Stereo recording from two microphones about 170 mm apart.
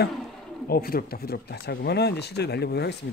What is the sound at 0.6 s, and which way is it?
Speech, 60° left (ahead or behind).